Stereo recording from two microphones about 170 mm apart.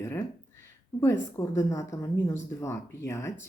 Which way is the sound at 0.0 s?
20° left (ahead or behind).